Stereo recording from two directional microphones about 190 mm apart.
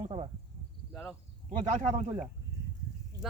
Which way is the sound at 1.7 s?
40° right (ahead or behind).